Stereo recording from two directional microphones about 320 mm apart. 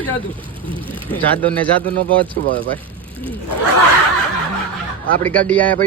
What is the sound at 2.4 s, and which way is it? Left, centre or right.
Speech, right.